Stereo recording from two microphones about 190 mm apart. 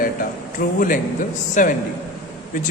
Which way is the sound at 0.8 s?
45° left (ahead or behind).